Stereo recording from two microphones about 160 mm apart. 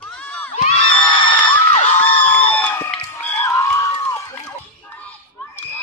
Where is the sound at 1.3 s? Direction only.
35° left (ahead or behind).